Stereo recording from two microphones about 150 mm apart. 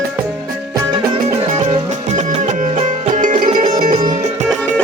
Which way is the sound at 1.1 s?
45° right (ahead or behind).